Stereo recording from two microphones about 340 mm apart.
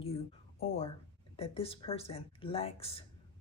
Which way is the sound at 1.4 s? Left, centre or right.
Centre.